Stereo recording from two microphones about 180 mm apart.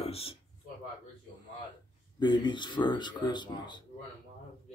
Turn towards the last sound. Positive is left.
turn(degrees=25)  # may be behind; listen again after turning